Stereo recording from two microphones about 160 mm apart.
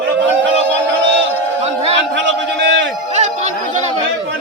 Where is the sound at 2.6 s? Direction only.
90° right.